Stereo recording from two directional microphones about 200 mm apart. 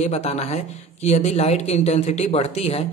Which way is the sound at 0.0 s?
35° left (ahead or behind).